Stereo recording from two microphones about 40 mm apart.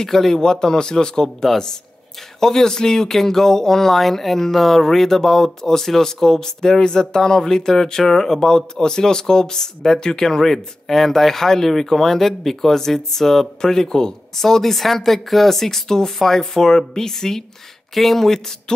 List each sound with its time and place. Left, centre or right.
0.0 s speech: centre